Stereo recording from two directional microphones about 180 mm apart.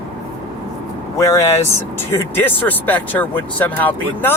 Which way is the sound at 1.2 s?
15° left (ahead or behind).